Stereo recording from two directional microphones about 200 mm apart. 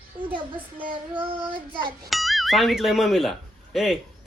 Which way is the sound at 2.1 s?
Centre (ahead or behind).